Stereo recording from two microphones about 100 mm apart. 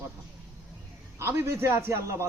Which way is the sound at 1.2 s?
25° right (ahead or behind).